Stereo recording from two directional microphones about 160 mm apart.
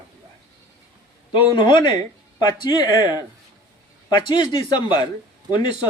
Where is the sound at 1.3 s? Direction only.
30° left (ahead or behind).